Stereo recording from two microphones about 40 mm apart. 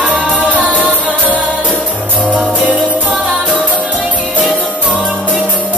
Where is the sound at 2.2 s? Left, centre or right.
Right.